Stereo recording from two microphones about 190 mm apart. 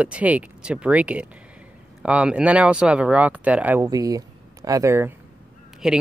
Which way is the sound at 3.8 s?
20° right (ahead or behind).